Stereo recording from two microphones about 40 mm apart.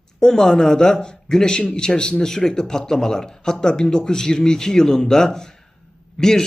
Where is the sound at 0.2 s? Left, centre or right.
Centre.